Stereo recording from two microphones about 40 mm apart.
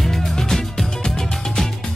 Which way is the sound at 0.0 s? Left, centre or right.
Centre.